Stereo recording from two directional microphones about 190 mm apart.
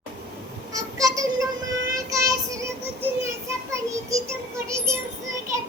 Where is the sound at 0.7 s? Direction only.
20° right (ahead or behind).